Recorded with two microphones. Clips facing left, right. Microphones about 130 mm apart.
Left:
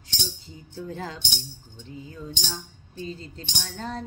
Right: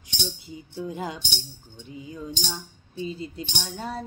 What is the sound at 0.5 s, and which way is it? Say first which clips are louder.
Speech: right 2 dB; 15° right (ahead or behind).